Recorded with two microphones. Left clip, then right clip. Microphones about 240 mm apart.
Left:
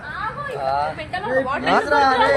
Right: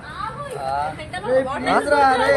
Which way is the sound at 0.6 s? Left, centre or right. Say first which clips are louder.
Left 2 dB; right.